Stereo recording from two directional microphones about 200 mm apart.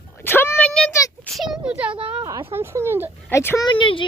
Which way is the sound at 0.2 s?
10° left (ahead or behind).